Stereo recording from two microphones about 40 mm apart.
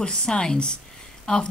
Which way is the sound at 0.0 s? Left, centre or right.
Left.